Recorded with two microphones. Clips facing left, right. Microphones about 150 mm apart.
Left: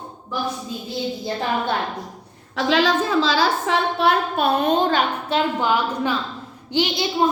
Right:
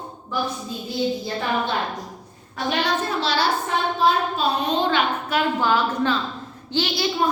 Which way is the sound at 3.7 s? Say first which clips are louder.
Left 2 dB; 65° left (ahead or behind).